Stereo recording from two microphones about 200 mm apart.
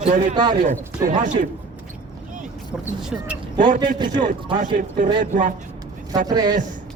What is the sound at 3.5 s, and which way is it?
Speech, 40° right (ahead or behind).